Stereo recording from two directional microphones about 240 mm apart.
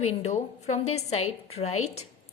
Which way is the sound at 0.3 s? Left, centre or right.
Left.